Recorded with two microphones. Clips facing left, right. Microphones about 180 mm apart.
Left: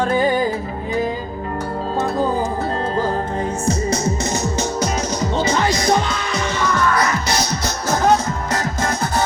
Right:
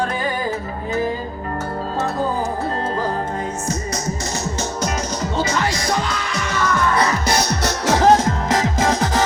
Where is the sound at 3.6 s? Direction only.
30° left (ahead or behind).